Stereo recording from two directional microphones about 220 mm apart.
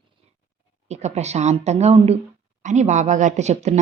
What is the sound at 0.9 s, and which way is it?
A woman's voice, 30° right (ahead or behind).